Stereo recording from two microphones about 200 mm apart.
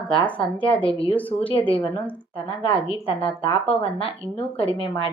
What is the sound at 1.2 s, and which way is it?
Speech, 10° left (ahead or behind).